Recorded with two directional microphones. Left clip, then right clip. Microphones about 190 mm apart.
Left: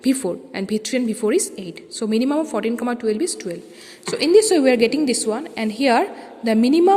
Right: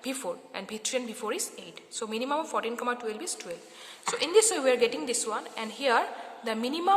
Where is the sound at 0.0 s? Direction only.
20° left (ahead or behind).